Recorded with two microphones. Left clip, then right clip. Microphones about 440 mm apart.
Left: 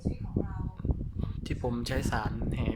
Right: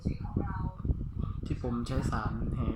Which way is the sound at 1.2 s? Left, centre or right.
Centre.